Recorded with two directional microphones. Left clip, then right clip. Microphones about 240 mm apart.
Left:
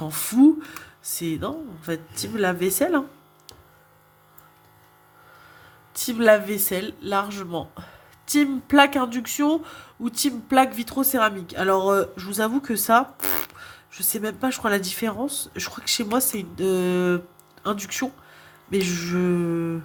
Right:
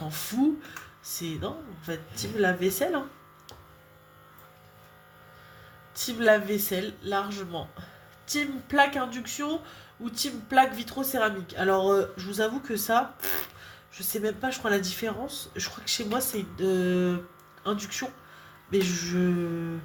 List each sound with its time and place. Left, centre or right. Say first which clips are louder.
0.0 s speech: left 10 dB; left
5.9 s speech: left 5 dB; left